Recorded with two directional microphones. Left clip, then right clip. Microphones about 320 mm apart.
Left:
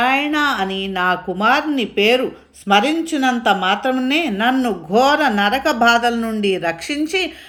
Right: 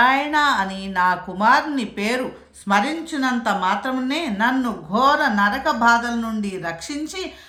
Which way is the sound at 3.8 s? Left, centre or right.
Right.